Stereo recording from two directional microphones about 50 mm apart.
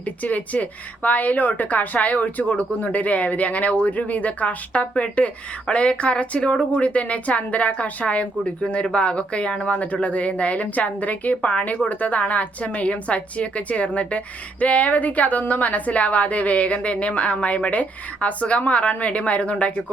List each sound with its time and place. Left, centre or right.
0.0 s a woman's voice: left